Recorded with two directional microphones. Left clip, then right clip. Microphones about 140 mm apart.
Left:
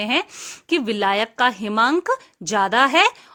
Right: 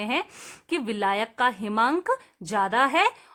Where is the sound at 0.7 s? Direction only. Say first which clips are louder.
Left 6 dB; 25° left (ahead or behind).